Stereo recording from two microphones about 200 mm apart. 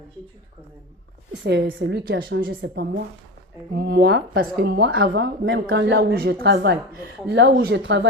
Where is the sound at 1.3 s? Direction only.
55° right (ahead or behind).